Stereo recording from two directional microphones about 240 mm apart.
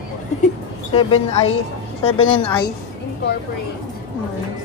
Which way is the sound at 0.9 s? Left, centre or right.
Left.